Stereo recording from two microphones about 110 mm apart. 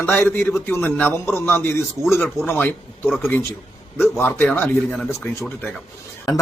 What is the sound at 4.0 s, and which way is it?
A man's voice, 20° left (ahead or behind).